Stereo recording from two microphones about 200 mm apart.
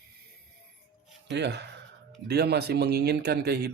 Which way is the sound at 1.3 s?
60° right (ahead or behind).